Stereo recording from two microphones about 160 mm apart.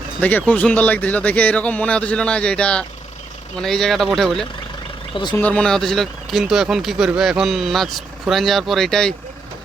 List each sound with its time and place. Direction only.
0.2 s a man's voice: 10° left (ahead or behind)